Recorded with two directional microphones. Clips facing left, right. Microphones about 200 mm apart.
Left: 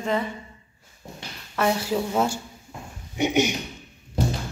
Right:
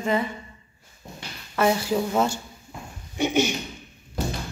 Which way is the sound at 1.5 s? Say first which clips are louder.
Right 2 dB; centre (ahead or behind).